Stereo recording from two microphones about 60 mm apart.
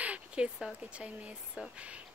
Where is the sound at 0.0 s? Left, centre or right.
Right.